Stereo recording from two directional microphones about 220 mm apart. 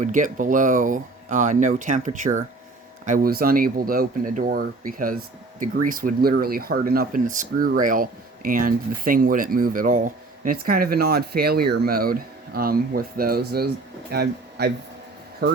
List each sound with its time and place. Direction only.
0.0 s speech: 35° right (ahead or behind)